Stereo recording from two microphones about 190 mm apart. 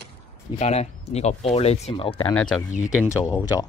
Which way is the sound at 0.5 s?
35° left (ahead or behind).